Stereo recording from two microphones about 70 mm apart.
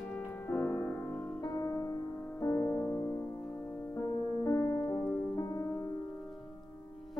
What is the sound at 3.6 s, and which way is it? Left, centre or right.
Music, left.